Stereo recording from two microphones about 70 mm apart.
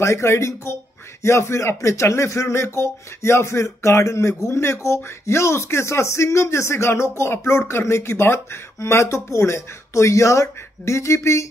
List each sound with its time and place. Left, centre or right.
0.0 s speech: left